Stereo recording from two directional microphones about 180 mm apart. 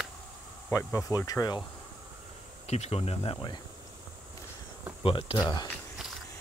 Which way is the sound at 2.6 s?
35° left (ahead or behind).